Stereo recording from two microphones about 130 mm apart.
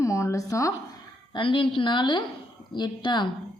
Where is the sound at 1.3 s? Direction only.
40° left (ahead or behind).